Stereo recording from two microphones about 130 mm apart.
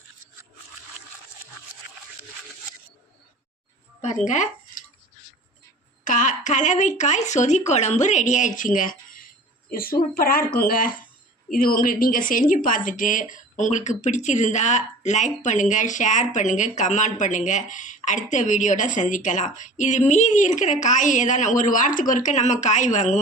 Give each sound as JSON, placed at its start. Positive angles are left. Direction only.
{"t": 4.0, "sound": "speech", "side_deg": 65}
{"t": 6.1, "sound": "speech", "side_deg": 80}
{"t": 10.5, "sound": "speech", "side_deg": 90}
{"t": 13.6, "sound": "speech", "side_deg": 70}